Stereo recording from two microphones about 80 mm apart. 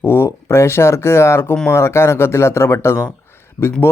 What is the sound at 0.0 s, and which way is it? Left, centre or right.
Speech, left.